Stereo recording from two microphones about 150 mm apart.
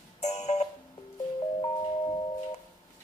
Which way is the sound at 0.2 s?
50° left (ahead or behind).